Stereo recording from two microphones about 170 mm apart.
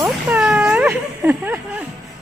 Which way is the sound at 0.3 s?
5° right (ahead or behind).